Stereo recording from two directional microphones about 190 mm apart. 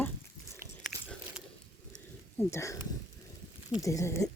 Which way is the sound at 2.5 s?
15° left (ahead or behind).